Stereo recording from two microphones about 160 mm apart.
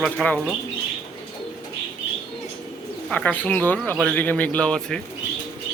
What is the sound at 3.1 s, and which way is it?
A man's voice, 10° left (ahead or behind).